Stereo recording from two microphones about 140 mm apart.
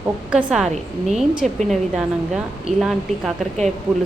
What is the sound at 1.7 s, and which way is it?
A woman's voice, 5° right (ahead or behind).